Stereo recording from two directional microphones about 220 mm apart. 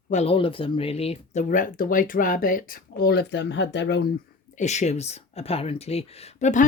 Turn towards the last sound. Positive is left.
turn(degrees=30)  # may be behind; listen again after turning